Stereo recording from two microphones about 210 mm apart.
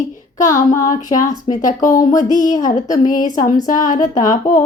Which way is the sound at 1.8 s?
40° left (ahead or behind).